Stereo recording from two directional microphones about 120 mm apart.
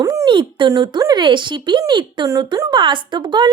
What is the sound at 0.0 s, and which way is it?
Speech, 30° right (ahead or behind).